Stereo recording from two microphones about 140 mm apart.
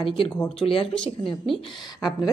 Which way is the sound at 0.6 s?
40° left (ahead or behind).